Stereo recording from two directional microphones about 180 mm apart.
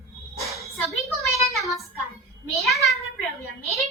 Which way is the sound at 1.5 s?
Centre (ahead or behind).